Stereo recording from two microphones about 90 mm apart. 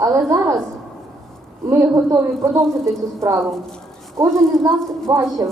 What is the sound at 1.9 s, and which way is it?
A woman's voice, 35° right (ahead or behind).